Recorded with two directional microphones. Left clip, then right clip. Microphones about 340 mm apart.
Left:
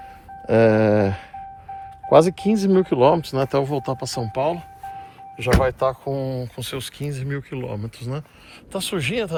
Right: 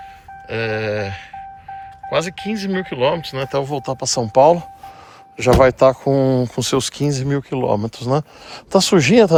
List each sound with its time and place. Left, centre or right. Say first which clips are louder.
0.4 s speech: left 6 dB; centre
2.0 s speech: left 6 dB; centre
5.4 s speech: right 8 dB; right